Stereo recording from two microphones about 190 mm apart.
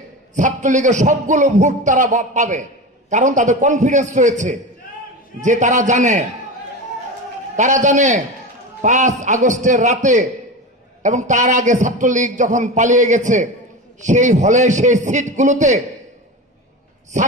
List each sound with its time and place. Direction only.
0.3 s a man's voice: 40° right (ahead or behind)
7.5 s a man's voice: 40° right (ahead or behind)